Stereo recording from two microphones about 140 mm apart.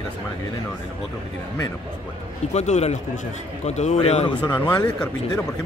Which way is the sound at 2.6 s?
55° left (ahead or behind).